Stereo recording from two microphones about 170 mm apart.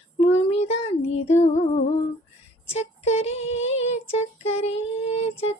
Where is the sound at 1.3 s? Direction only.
40° left (ahead or behind).